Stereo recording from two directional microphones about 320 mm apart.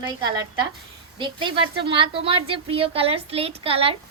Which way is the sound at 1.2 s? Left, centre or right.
Centre.